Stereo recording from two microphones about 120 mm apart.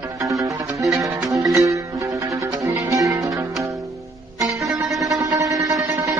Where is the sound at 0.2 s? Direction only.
25° right (ahead or behind).